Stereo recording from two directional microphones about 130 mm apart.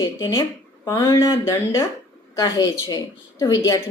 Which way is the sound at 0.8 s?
20° left (ahead or behind).